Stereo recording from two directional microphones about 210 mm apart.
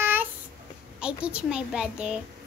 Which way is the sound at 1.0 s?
5° right (ahead or behind).